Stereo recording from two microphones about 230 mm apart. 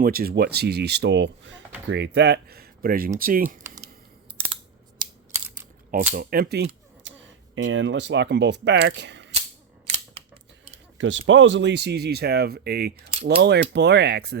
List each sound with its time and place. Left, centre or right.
0.0 s speech: right
4.9 s a sound: centre
6.1 s speech: right
10.9 s speech: right